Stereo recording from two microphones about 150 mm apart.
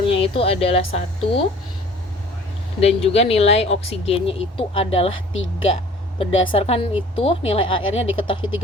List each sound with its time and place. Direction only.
0.0 s speech: 40° left (ahead or behind)
2.8 s a woman's voice: 40° left (ahead or behind)